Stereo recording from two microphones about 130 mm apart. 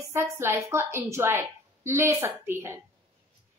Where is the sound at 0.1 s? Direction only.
20° right (ahead or behind).